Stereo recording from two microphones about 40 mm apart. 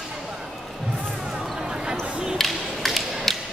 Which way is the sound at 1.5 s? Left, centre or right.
Centre.